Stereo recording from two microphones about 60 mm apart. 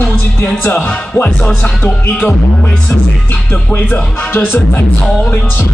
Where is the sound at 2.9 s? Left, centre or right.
Left.